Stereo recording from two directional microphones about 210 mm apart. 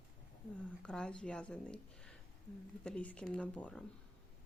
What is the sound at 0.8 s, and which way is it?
A woman's voice, 5° left (ahead or behind).